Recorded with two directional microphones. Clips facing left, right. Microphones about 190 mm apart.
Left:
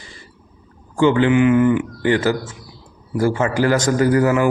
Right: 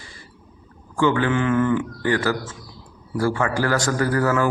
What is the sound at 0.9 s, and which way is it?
A man's voice, 20° left (ahead or behind).